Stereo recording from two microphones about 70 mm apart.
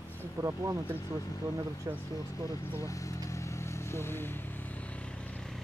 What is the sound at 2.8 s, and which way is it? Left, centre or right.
Vehicle, left.